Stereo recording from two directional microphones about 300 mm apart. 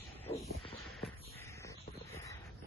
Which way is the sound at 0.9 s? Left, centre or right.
Centre.